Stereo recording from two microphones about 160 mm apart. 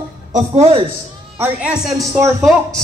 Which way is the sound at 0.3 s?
45° right (ahead or behind).